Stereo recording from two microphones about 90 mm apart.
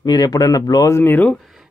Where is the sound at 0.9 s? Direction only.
25° left (ahead or behind).